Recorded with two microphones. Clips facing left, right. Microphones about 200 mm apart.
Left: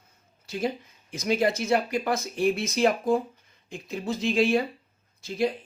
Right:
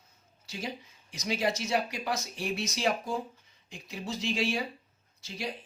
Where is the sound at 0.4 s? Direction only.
55° left (ahead or behind).